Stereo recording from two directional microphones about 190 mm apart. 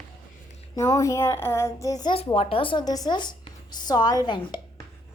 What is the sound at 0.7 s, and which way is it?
Speech, 15° left (ahead or behind).